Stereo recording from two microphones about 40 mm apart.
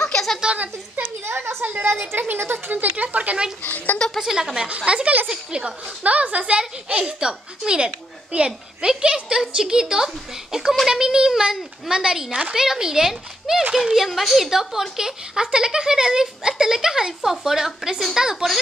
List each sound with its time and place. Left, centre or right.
0.0 s a sound: centre
1.2 s a sound: right
2.3 s speech: right
2.7 s speech: right
3.6 s a child's voice: left
4.2 s speech: centre
4.6 s speech: right
5.3 s speech: centre
6.0 s a woman's voice: right; by 12.3 s centre
12.3 s speech: right
12.5 s speech: centre